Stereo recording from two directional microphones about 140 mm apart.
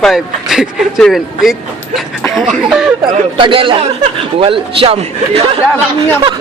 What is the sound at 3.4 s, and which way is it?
A man's voice, 35° right (ahead or behind).